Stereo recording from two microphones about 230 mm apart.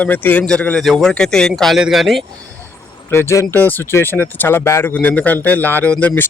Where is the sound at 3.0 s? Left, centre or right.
Centre.